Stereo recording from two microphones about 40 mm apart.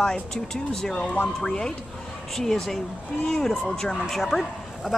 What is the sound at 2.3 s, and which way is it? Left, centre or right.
Speech, centre.